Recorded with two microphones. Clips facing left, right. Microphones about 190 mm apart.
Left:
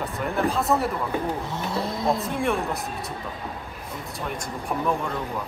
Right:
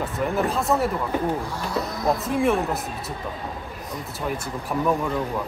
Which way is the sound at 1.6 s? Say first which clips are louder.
Even; 25° left (ahead or behind).